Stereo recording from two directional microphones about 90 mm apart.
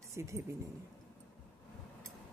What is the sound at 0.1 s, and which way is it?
Speech, 35° right (ahead or behind).